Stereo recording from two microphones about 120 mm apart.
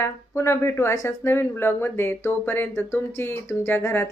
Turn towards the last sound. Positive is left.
turn(degrees=20)  # may be behind; listen again after turning